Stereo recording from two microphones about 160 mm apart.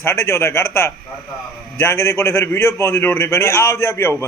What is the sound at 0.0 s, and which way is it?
A man's voice, 15° left (ahead or behind).